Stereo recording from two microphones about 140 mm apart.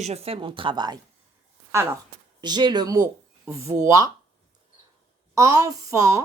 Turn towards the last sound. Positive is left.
turn(degrees=-20)  # may be behind; listen again after turning